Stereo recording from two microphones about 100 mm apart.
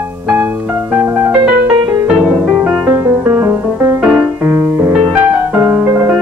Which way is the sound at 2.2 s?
5° right (ahead or behind).